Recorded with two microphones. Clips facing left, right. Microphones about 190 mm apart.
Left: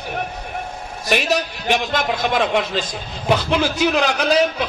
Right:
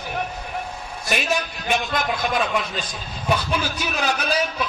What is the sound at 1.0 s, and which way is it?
A man's voice, 70° left (ahead or behind).